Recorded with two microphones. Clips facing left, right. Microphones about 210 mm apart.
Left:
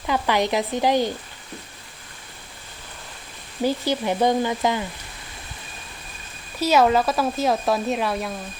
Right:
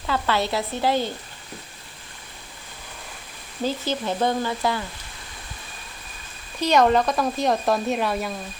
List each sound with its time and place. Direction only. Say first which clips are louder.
0.1 s speech: left 2 dB; 15° left (ahead or behind)
3.6 s speech: left 3 dB; 15° left (ahead or behind)
6.6 s speech: even; 5° left (ahead or behind)